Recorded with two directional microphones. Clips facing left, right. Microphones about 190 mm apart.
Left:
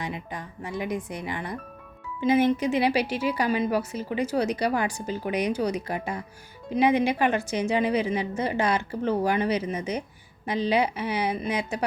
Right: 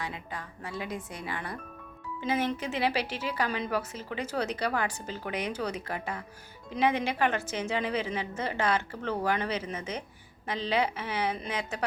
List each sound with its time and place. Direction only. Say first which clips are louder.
0.0 s a woman's voice: left 4 dB; 20° left (ahead or behind)